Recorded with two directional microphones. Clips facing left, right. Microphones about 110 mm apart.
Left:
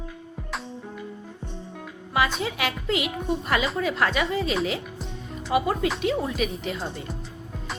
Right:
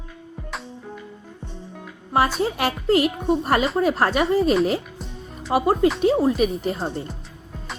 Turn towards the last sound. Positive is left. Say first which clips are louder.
# right 5 dB
turn(degrees=-35)  # may be behind; listen again after turning